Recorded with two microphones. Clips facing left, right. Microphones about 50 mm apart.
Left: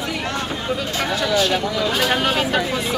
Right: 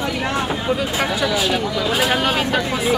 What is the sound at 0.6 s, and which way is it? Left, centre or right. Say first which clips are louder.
Speech: right 3 dB; centre.